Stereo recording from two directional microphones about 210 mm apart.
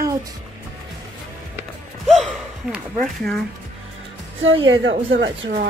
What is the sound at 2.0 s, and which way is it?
Gasp, centre (ahead or behind).